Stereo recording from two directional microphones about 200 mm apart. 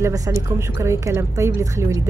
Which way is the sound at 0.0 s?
15° right (ahead or behind).